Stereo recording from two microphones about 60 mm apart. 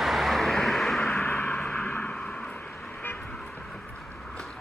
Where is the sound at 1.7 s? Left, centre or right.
Left.